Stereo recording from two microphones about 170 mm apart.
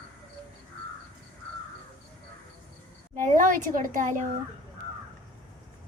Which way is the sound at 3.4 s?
50° right (ahead or behind).